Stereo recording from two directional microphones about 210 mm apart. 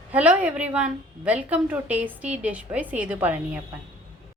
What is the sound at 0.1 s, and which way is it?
A woman's voice, 5° right (ahead or behind).